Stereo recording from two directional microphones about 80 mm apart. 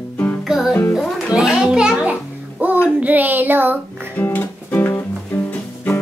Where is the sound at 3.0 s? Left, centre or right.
Right.